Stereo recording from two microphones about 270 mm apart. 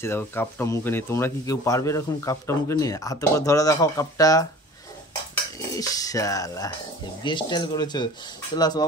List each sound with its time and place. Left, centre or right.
0.0 s speech: centre
5.6 s speech: centre